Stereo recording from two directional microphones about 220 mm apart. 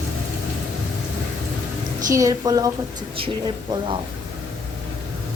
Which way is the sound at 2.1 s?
15° right (ahead or behind).